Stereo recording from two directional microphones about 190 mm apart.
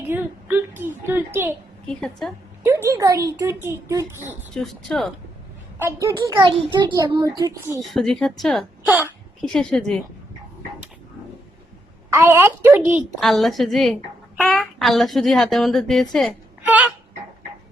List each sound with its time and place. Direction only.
0.1 s a sound: 10° right (ahead or behind)
1.9 s speech: centre (ahead or behind)
2.6 s a child's voice: 15° right (ahead or behind)
4.5 s speech: centre (ahead or behind)
5.8 s a child's voice: 15° right (ahead or behind)
7.8 s speech: centre (ahead or behind)
12.1 s a child's voice: 15° right (ahead or behind)
13.1 s speech: centre (ahead or behind)
16.6 s a sound: 10° right (ahead or behind)